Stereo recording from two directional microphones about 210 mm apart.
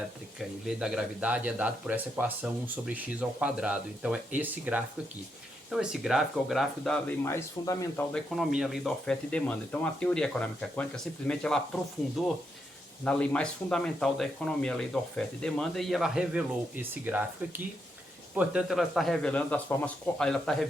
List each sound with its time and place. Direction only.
0.3 s speech: centre (ahead or behind); by 8.0 s 15° left (ahead or behind)
8.1 s speech: centre (ahead or behind)
13.1 s speech: 5° left (ahead or behind)
18.3 s speech: 5° right (ahead or behind)